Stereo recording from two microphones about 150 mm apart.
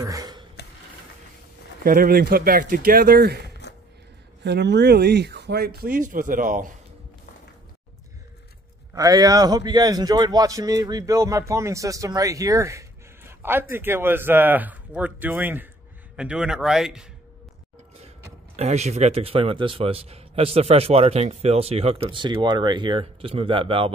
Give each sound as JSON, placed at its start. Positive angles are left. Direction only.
{"t": 0.0, "sound": "a sound", "side_deg": -25}
{"t": 1.8, "sound": "speech", "side_deg": -70}
{"t": 8.9, "sound": "a man's voice", "side_deg": -25}
{"t": 18.6, "sound": "a man's voice", "side_deg": -45}